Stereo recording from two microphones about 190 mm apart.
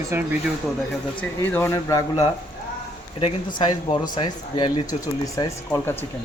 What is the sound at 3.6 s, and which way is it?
Speech, 25° left (ahead or behind).